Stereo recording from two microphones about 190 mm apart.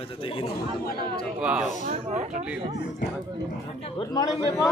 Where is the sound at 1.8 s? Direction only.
40° right (ahead or behind).